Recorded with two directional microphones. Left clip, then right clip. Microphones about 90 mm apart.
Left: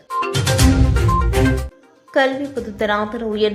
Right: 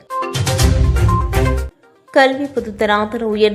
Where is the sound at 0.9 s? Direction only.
Centre (ahead or behind).